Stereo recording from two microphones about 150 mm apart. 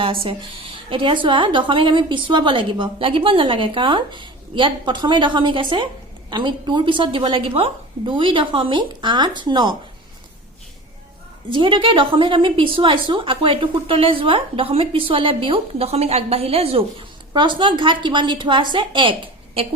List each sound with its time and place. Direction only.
0.0 s a woman's voice: 35° right (ahead or behind)
11.5 s a woman's voice: 35° right (ahead or behind)